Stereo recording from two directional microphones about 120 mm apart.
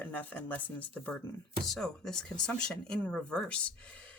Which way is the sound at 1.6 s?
5° left (ahead or behind).